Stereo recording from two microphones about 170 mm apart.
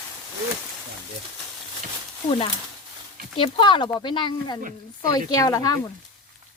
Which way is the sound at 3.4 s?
30° left (ahead or behind).